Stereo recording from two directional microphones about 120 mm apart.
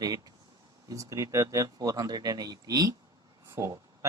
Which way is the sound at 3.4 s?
25° right (ahead or behind).